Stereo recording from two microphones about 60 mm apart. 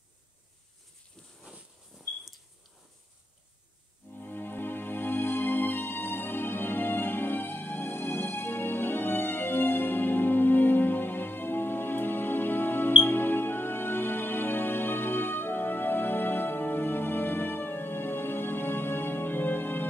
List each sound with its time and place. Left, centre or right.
4.1 s music: left